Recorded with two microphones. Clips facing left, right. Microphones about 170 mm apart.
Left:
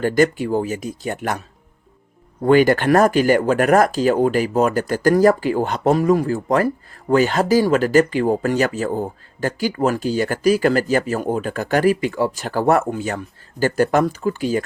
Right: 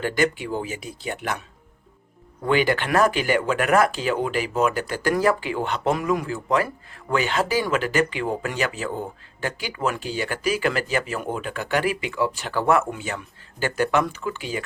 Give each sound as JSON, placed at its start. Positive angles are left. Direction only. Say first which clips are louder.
{"t": 0.0, "sound": "speech", "louder": "left 6 dB", "side_deg": 45}
{"t": 2.4, "sound": "speech", "louder": "left 7 dB", "side_deg": 45}